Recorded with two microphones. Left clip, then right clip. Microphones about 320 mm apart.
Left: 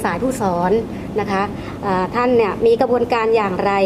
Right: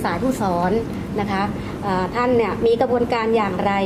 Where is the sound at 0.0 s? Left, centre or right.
Left.